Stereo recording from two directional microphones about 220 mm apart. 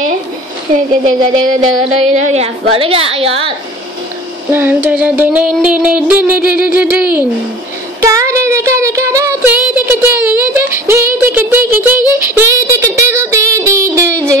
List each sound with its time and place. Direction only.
1.0 s a sound: 35° right (ahead or behind)
2.2 s a woman's voice: 30° right (ahead or behind)
4.5 s child singing: 10° right (ahead or behind)